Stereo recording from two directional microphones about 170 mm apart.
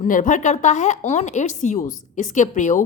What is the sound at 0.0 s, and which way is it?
Speech, 50° left (ahead or behind).